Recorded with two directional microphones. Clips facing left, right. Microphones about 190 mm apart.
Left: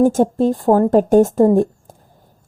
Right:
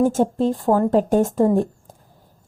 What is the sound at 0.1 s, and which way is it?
A woman's voice, 45° left (ahead or behind).